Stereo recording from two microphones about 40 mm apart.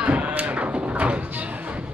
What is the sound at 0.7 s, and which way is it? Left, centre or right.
Sheep, right.